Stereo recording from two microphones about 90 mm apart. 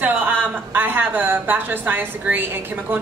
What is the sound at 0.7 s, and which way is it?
A woman's voice, 20° right (ahead or behind).